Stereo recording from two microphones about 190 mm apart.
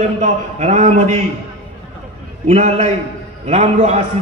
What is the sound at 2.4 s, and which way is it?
A man's voice, 35° right (ahead or behind).